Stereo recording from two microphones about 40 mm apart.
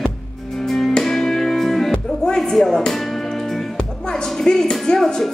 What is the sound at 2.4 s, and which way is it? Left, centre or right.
Music, centre.